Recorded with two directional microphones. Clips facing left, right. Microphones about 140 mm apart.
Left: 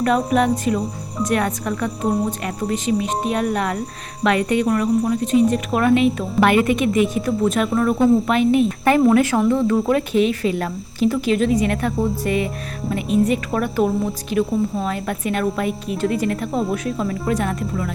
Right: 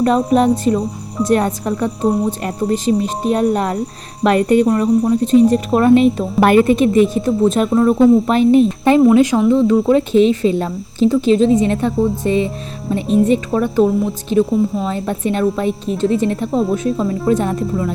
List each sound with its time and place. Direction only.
0.0 s a woman's voice: 30° right (ahead or behind)
4.6 s a woman's voice: 25° right (ahead or behind)
9.1 s speech: 15° right (ahead or behind)
14.3 s a woman's voice: 30° right (ahead or behind)